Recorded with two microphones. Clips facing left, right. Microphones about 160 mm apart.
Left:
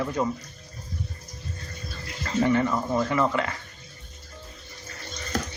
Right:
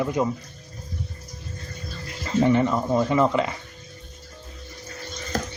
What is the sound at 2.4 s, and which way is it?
Speech, 20° right (ahead or behind).